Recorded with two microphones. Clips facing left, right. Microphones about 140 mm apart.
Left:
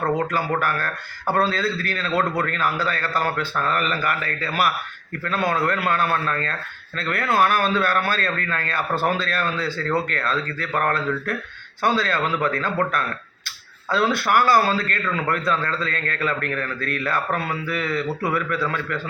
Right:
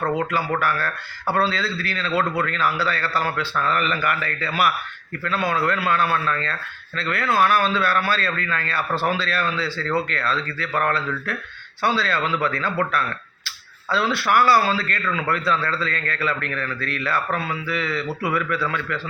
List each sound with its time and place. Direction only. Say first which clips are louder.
0.3 s a man's voice: even; 45° left (ahead or behind)
13.9 s a man's voice: left 1 dB; 50° left (ahead or behind)